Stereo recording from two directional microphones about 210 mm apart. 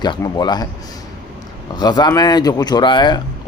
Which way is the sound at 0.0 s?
20° left (ahead or behind).